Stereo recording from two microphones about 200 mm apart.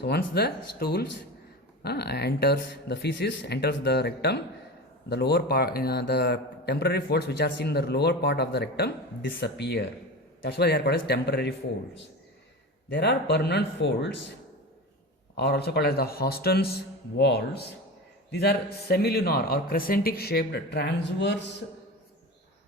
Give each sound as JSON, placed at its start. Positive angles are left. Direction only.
{"t": 0.0, "sound": "a man's voice", "side_deg": 55}
{"t": 12.9, "sound": "speech", "side_deg": 60}
{"t": 15.4, "sound": "a man's voice", "side_deg": 55}